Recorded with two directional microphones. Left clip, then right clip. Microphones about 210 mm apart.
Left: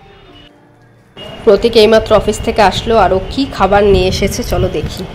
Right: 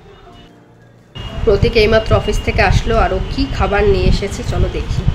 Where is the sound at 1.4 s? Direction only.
25° left (ahead or behind).